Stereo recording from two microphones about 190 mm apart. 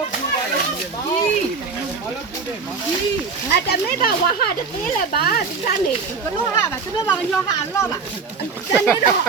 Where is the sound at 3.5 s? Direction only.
60° left (ahead or behind).